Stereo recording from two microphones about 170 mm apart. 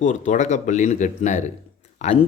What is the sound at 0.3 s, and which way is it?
Speech, 45° left (ahead or behind).